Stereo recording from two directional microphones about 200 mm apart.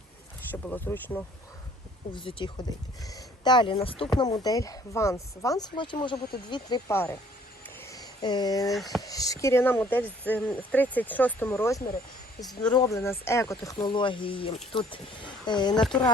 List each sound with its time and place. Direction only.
0.5 s speech: 10° left (ahead or behind)
2.1 s speech: 25° left (ahead or behind)
7.8 s a sound: 15° left (ahead or behind)
8.7 s speech: centre (ahead or behind)
9.0 s speech: 15° left (ahead or behind)
12.4 s speech: centre (ahead or behind)
12.7 s speech: 15° left (ahead or behind)